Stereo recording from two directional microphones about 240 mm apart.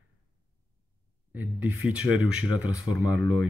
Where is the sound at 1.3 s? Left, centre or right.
Centre.